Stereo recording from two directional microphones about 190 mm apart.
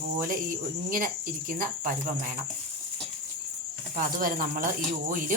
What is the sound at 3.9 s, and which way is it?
Speech, 50° right (ahead or behind).